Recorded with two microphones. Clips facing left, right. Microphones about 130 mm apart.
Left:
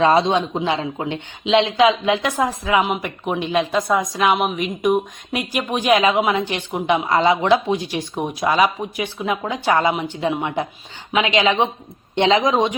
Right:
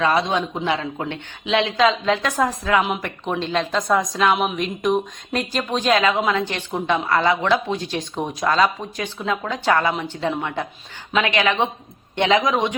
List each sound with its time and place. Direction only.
0.0 s a man's voice: 25° left (ahead or behind)
2.8 s a woman's voice: 5° left (ahead or behind); by 12.7 s 20° left (ahead or behind)